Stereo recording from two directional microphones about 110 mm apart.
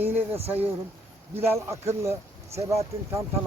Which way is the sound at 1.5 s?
25° right (ahead or behind).